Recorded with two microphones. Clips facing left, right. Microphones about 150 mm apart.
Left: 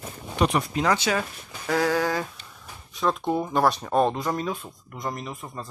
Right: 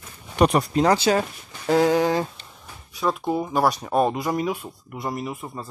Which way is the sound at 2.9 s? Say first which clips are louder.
Right 1 dB; 5° right (ahead or behind).